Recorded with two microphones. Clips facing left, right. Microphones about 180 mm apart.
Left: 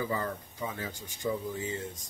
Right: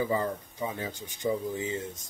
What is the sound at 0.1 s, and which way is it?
Speech, 20° right (ahead or behind).